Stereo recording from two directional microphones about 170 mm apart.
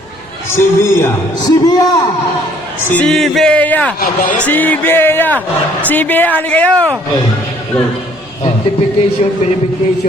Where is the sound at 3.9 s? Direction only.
55° left (ahead or behind).